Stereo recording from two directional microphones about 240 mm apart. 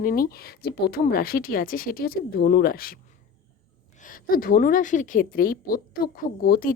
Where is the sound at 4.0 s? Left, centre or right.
Left.